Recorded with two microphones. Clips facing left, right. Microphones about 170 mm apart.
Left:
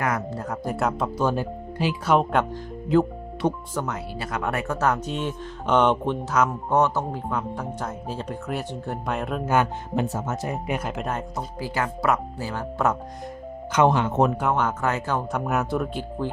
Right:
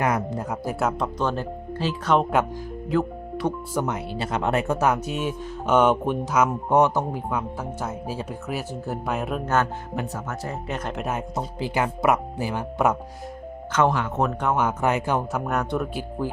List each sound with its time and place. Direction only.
0.0 s speech: 20° right (ahead or behind); by 2.1 s 10° left (ahead or behind)
2.1 s speech: 5° right (ahead or behind)
2.9 s music: 25° left (ahead or behind)
3.8 s speech: 20° right (ahead or behind)
9.9 s speech: 25° left (ahead or behind); by 11.0 s 10° left (ahead or behind)
11.3 s speech: 20° right (ahead or behind)
13.7 s speech: 20° left (ahead or behind)
14.5 s speech: 10° right (ahead or behind)
15.3 s speech: centre (ahead or behind)
16.0 s speech: 10° right (ahead or behind)